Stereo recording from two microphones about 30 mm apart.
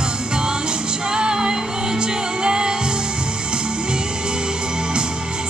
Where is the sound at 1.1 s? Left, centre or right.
Right.